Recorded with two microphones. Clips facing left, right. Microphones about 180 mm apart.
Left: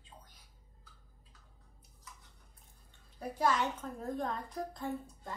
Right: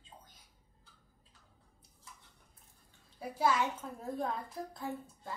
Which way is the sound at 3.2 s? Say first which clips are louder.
Even; 5° right (ahead or behind).